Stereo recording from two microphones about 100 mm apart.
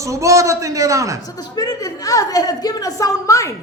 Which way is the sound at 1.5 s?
40° left (ahead or behind).